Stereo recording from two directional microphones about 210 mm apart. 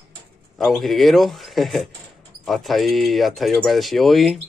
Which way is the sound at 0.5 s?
Centre (ahead or behind).